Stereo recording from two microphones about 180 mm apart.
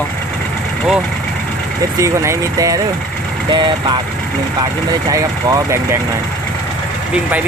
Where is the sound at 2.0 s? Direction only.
15° right (ahead or behind).